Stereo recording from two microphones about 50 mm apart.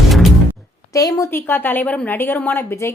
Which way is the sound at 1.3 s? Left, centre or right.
Left.